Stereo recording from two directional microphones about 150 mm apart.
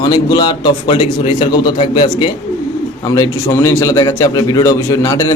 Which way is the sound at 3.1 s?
20° left (ahead or behind).